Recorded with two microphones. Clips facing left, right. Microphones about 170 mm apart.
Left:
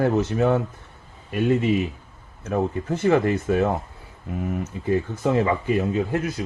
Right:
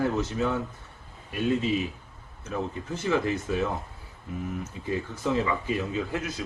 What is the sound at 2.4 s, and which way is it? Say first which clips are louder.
Speech: left 8 dB; 55° left (ahead or behind).